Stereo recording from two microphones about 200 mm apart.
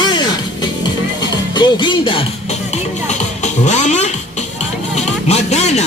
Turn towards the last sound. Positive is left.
turn(degrees=35)  # may be behind; listen again after turning